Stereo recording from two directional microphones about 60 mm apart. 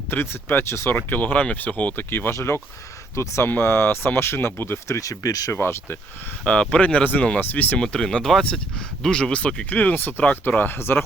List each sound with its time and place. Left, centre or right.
0.1 s speech: left
0.6 s speech: left
0.9 s speech: left
2.3 s speech: left
4.9 s speech: left
5.5 s speech: left
6.4 s speech: centre
7.8 s speech: centre; by 11.0 s left